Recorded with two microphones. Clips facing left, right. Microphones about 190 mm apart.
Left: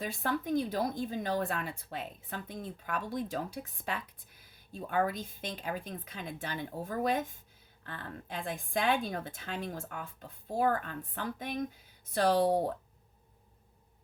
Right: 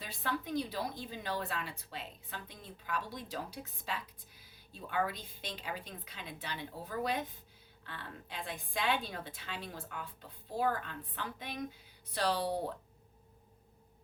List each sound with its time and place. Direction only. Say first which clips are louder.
0.0 s speech: left 5 dB; 45° left (ahead or behind)